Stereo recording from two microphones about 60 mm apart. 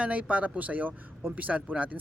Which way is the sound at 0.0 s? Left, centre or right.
Right.